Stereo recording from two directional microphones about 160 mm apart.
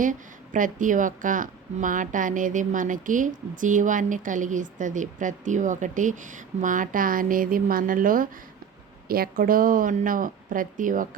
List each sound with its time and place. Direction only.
0.0 s a woman's voice: 55° right (ahead or behind)